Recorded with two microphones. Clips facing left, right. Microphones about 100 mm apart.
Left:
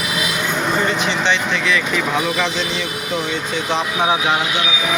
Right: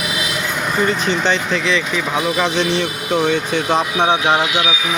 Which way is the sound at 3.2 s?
60° right (ahead or behind).